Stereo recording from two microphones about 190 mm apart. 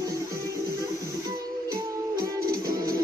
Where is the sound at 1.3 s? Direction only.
50° right (ahead or behind).